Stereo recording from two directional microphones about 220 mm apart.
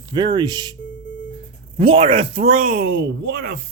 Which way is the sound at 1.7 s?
25° right (ahead or behind).